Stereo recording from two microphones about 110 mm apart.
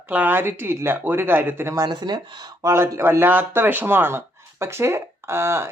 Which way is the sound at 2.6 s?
25° right (ahead or behind).